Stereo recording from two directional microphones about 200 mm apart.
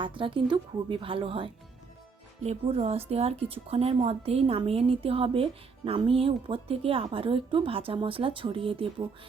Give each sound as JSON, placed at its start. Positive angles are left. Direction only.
{"t": 0.0, "sound": "a woman's voice", "side_deg": -25}